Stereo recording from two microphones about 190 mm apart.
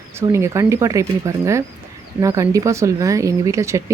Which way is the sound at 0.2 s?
15° right (ahead or behind).